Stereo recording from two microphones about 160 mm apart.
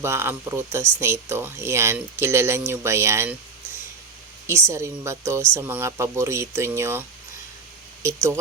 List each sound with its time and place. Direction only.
0.0 s speech: 15° right (ahead or behind)
4.4 s speech: 15° right (ahead or behind)
8.0 s speech: 15° right (ahead or behind)